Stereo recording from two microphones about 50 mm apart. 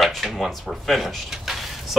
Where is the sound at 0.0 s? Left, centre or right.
Centre.